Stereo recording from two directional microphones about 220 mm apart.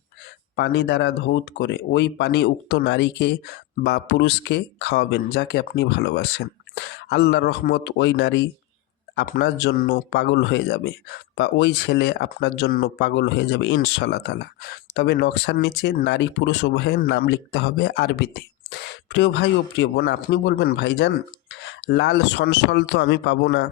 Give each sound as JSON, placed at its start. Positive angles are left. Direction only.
{"t": 0.5, "sound": "speech", "side_deg": 50}